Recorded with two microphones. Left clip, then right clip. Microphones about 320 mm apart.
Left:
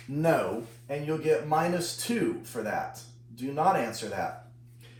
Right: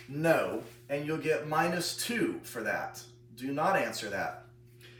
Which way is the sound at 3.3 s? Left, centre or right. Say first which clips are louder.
Left 3 dB; centre.